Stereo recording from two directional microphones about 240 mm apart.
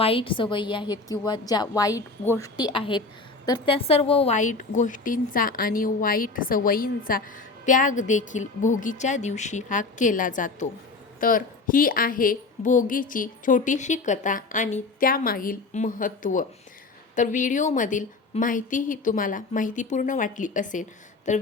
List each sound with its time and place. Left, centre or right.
0.0 s a woman's voice: left